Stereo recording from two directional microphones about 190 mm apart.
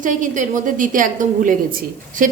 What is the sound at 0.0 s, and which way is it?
A woman's voice, 45° right (ahead or behind).